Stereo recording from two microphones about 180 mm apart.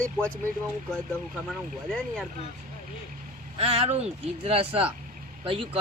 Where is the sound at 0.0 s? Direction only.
5° left (ahead or behind).